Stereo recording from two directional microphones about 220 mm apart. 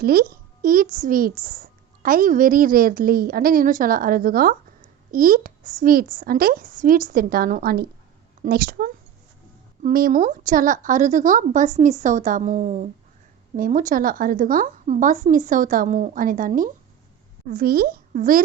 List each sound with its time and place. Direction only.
0.0 s a child's voice: 45° right (ahead or behind)